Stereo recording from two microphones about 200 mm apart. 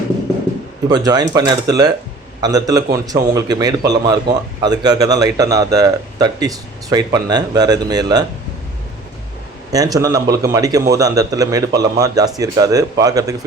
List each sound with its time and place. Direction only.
0.9 s a man's voice: 20° right (ahead or behind)
9.7 s a man's voice: 15° right (ahead or behind)